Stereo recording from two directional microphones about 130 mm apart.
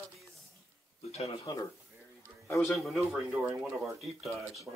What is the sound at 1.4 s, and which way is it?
Speech, 30° left (ahead or behind).